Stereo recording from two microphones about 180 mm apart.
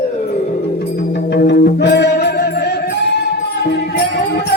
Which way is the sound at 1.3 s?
65° left (ahead or behind).